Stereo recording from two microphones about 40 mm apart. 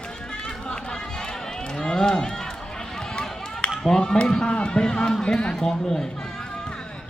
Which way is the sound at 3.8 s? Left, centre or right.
Centre.